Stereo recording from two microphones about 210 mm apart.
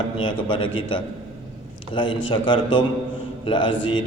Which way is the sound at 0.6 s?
75° left (ahead or behind).